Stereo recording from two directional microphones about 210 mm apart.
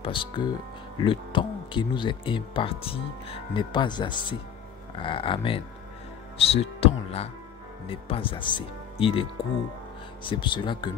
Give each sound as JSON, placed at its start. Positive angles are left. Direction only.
{"t": 0.0, "sound": "speech", "side_deg": 25}